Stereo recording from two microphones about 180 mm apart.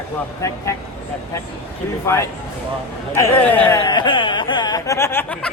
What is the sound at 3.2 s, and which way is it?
Speech, 10° left (ahead or behind).